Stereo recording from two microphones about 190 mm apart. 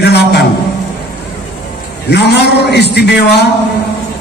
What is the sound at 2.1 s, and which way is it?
A man's voice, 60° left (ahead or behind).